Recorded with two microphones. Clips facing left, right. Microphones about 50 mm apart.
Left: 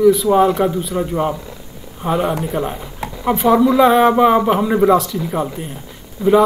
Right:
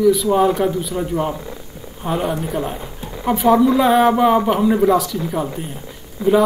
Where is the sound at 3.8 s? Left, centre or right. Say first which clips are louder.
Left 2 dB; centre.